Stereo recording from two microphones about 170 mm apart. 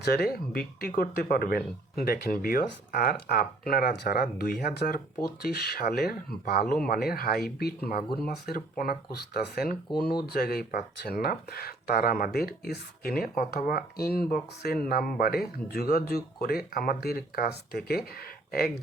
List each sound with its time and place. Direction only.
0.0 s speech: 70° left (ahead or behind)